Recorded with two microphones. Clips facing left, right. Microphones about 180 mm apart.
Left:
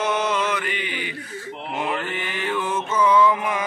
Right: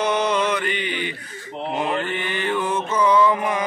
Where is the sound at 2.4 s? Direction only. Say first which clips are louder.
Right 1 dB; 5° left (ahead or behind).